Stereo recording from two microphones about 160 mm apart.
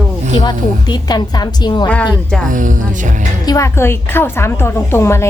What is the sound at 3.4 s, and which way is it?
A woman's voice, 20° left (ahead or behind).